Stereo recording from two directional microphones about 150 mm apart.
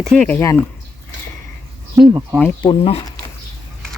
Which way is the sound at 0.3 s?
15° left (ahead or behind).